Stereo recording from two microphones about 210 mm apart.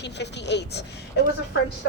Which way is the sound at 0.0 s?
55° left (ahead or behind).